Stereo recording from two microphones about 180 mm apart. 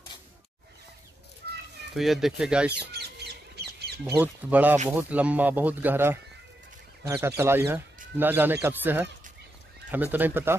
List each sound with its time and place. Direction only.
2.0 s speech: centre (ahead or behind)
2.9 s a sound: 65° right (ahead or behind)
4.2 s speech: 10° right (ahead or behind)